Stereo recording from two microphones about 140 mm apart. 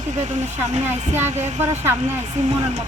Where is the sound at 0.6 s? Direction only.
15° right (ahead or behind).